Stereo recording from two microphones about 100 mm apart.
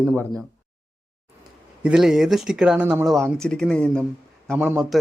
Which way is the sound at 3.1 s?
5° left (ahead or behind).